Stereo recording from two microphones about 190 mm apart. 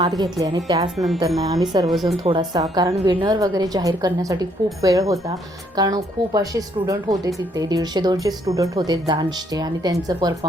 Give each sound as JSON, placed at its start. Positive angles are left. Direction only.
{"t": 0.0, "sound": "a woman's voice", "side_deg": -20}
{"t": 0.9, "sound": "speech", "side_deg": 0}
{"t": 1.4, "sound": "a woman's voice", "side_deg": -20}
{"t": 1.9, "sound": "speech", "side_deg": 0}
{"t": 2.2, "sound": "a woman's voice", "side_deg": -25}